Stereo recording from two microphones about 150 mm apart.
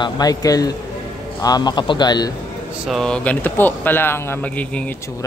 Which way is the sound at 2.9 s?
5° left (ahead or behind).